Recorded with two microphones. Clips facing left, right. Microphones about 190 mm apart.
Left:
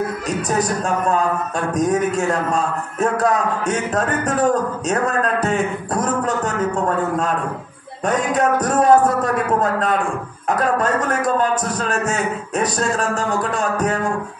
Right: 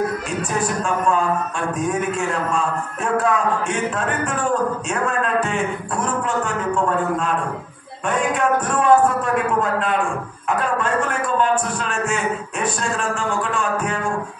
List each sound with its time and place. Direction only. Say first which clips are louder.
0.5 s a man's voice: left 2 dB; 40° left (ahead or behind)
8.1 s a man's voice: left 1 dB; 40° left (ahead or behind)